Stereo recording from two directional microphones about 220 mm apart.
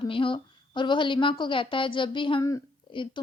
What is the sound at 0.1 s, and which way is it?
A woman's voice, 25° left (ahead or behind).